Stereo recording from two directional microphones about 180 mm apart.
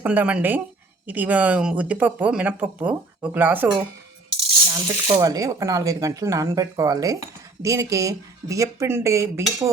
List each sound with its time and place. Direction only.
0.0 s speech: 10° right (ahead or behind)
4.7 s speech: 20° right (ahead or behind)